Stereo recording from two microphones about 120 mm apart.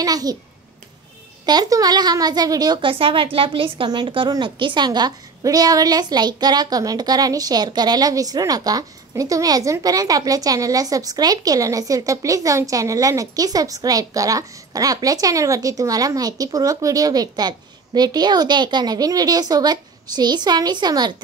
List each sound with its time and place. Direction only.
0.0 s a woman's voice: 30° right (ahead or behind)
1.4 s a woman's voice: 35° right (ahead or behind)